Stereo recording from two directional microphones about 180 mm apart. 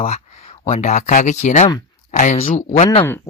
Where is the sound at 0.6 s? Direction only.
40° left (ahead or behind).